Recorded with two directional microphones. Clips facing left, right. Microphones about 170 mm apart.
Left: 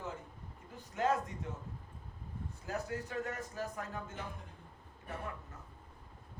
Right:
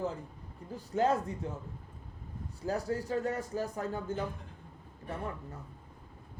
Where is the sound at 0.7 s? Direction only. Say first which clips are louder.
Right 4 dB; 35° right (ahead or behind).